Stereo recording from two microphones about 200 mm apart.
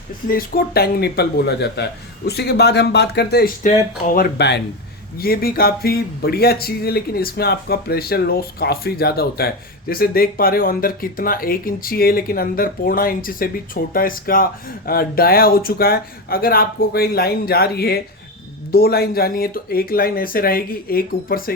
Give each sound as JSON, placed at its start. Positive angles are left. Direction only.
{"t": 0.3, "sound": "speech", "side_deg": 45}